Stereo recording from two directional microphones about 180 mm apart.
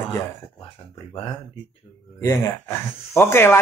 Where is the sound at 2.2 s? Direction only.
15° left (ahead or behind).